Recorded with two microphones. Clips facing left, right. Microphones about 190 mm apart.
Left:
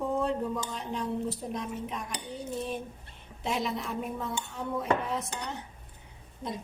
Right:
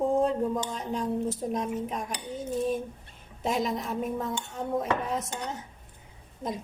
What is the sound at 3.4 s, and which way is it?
Speech, 45° right (ahead or behind).